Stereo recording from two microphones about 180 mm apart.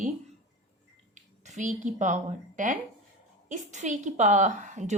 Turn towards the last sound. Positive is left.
turn(degrees=-40)  # may be behind; listen again after turning